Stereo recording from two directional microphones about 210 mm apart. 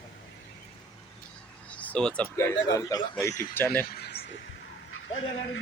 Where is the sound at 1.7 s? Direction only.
5° left (ahead or behind).